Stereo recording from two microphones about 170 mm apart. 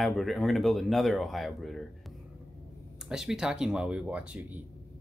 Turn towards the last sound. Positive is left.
turn(degrees=-10)  # may be behind; listen again after turning